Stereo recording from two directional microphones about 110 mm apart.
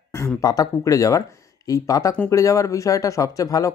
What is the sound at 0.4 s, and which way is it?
Speech, 35° left (ahead or behind).